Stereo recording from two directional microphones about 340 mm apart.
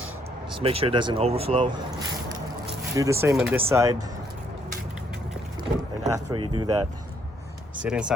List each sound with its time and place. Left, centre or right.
0.6 s speech: centre
2.9 s speech: centre
6.1 s speech: centre
7.9 s speech: centre